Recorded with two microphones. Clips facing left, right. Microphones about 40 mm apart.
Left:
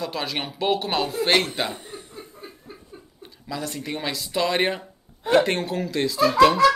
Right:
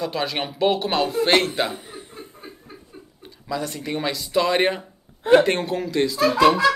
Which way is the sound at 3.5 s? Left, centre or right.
Centre.